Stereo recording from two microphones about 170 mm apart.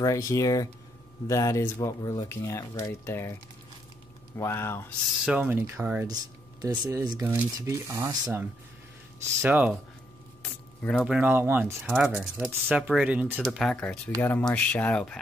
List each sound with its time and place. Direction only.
0.0 s speech: 20° left (ahead or behind)
4.4 s speech: 15° left (ahead or behind)
5.2 s speech: 10° right (ahead or behind)
6.0 s a sound: 20° right (ahead or behind)
6.8 s speech: 20° right (ahead or behind)
10.4 s keys jangling: 5° left (ahead or behind)
11.1 s speech: 10° right (ahead or behind); by 15.1 s 5° left (ahead or behind)